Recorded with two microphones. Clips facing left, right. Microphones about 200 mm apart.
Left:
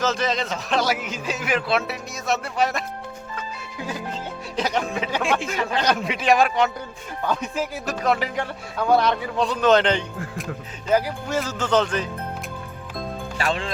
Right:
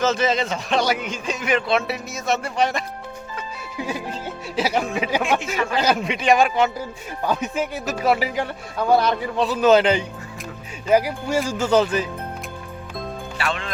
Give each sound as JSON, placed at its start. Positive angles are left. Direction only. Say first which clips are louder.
{"t": 0.0, "sound": "a man's voice", "louder": "right 3 dB", "side_deg": 0}
{"t": 4.5, "sound": "a man's voice", "louder": "right 2 dB", "side_deg": -5}
{"t": 13.4, "sound": "speech", "louder": "left 2 dB", "side_deg": 35}